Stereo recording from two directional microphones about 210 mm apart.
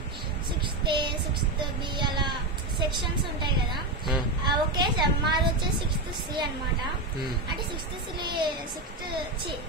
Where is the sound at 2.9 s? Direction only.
20° right (ahead or behind).